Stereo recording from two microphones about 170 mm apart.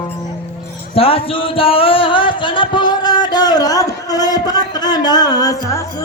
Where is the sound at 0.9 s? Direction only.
35° left (ahead or behind); by 5.9 s 20° left (ahead or behind).